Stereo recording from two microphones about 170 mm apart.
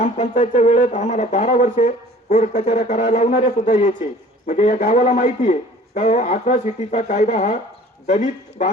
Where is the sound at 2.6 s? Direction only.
35° left (ahead or behind).